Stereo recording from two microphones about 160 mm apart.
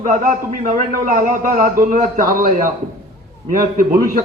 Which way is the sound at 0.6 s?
55° right (ahead or behind).